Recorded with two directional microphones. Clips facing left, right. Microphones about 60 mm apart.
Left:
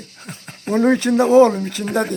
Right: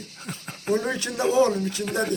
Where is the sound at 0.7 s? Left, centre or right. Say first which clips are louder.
Left 13 dB; left.